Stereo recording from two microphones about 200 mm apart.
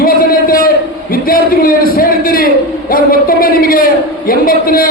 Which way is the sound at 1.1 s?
45° left (ahead or behind).